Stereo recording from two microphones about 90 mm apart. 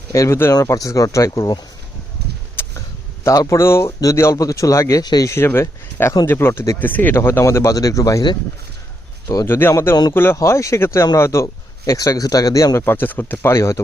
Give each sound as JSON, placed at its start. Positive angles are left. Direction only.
{"t": 0.1, "sound": "speech", "side_deg": 30}
{"t": 3.2, "sound": "speech", "side_deg": 35}
{"t": 5.3, "sound": "speech", "side_deg": 25}
{"t": 6.7, "sound": "speech", "side_deg": 20}
{"t": 9.5, "sound": "speech", "side_deg": 25}
{"t": 12.8, "sound": "speech", "side_deg": 25}